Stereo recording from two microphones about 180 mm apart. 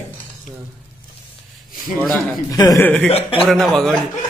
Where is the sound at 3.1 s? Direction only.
30° left (ahead or behind).